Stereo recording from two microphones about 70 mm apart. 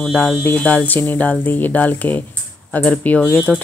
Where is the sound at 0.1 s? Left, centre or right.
Centre.